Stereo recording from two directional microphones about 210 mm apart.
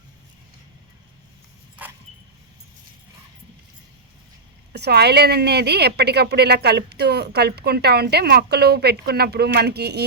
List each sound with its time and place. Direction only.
4.7 s a woman's voice: 50° right (ahead or behind)